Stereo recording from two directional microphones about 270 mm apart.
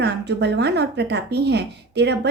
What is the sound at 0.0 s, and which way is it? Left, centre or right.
Speech, right.